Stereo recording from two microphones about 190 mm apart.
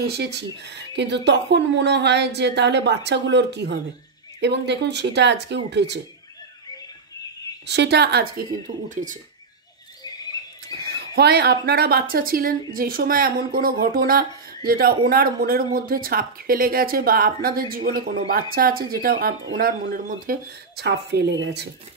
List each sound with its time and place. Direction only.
0.0 s speech: 60° right (ahead or behind)
7.6 s speech: 60° right (ahead or behind); by 9.2 s 40° right (ahead or behind)
10.0 s a sound: 20° left (ahead or behind)
11.0 s a woman's voice: 60° right (ahead or behind)